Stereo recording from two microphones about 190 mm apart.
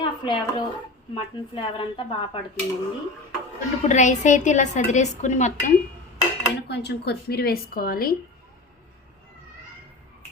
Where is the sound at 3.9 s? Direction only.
40° left (ahead or behind).